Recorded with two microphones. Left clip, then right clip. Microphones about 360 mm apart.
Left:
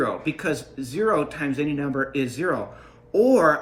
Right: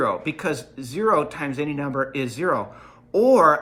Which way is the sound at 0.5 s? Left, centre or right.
Right.